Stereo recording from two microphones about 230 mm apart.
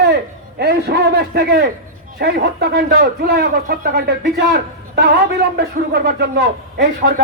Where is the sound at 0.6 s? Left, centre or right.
Right.